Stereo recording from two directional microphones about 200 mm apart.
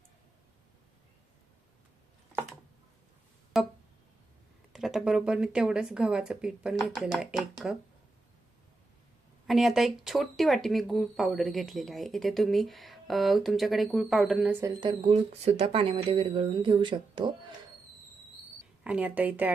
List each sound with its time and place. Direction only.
3.5 s music: centre (ahead or behind)
4.7 s speech: centre (ahead or behind)
9.5 s speech: centre (ahead or behind)
14.6 s speech: 20° right (ahead or behind)
18.8 s speech: 5° right (ahead or behind)